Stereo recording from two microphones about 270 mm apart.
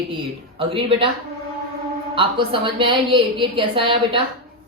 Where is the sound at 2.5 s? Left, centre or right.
Centre.